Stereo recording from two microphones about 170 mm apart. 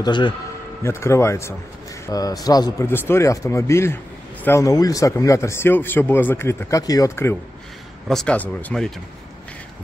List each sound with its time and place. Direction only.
0.0 s a man's voice: 25° left (ahead or behind)
0.8 s a man's voice: 15° left (ahead or behind)
8.1 s speech: 5° left (ahead or behind)